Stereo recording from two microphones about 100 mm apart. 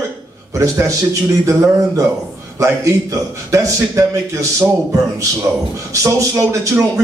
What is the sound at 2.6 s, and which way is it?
Speech, 30° right (ahead or behind).